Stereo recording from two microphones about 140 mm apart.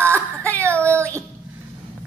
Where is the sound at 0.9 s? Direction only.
20° right (ahead or behind).